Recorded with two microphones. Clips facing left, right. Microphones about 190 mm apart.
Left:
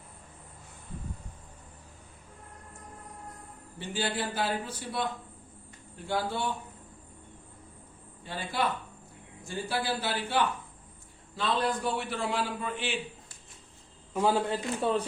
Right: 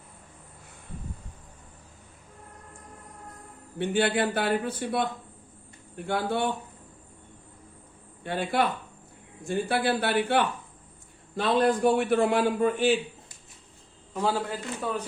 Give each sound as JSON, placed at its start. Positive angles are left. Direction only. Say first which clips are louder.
{"t": 3.8, "sound": "a man's voice", "louder": "right 8 dB", "side_deg": -65}
{"t": 8.2, "sound": "a man's voice", "louder": "right 5 dB", "side_deg": -60}
{"t": 14.1, "sound": "a man's voice", "louder": "left 1 dB", "side_deg": 10}
{"t": 14.5, "sound": "a man's voice", "louder": "left 3 dB", "side_deg": 30}